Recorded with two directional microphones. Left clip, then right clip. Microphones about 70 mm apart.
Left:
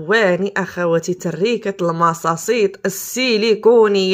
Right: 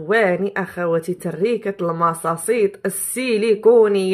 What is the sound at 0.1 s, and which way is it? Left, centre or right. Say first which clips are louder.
Speech: left 2 dB; left.